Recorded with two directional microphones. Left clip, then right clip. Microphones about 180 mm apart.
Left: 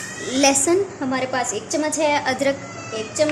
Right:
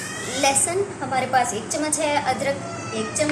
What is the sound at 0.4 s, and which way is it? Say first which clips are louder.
A woman's voice: left 4 dB; 55° left (ahead or behind).